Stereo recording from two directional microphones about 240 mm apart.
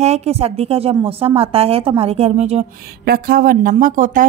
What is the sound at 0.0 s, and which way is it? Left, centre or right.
A woman's voice, right.